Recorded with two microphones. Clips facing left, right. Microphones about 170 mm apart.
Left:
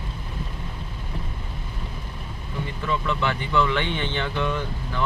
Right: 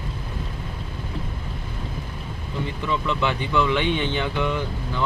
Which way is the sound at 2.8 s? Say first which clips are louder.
Right 1 dB; 15° right (ahead or behind).